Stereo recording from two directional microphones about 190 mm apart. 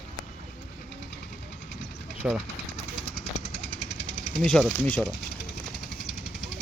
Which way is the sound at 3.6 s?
65° left (ahead or behind).